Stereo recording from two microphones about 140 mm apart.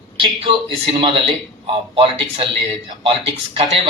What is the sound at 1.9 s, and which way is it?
A man's voice, 40° right (ahead or behind).